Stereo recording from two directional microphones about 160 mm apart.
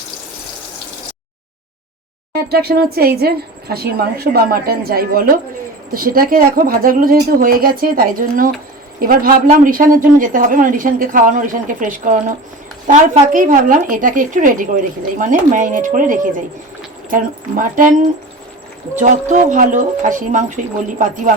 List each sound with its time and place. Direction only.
2.3 s speech: 80° right; by 17.9 s 55° right (ahead or behind)
18.9 s speech: 50° right (ahead or behind)